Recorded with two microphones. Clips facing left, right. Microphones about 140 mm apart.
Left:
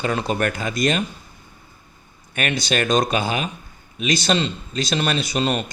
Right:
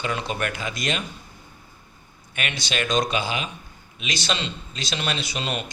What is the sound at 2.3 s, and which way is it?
Speech, 45° left (ahead or behind).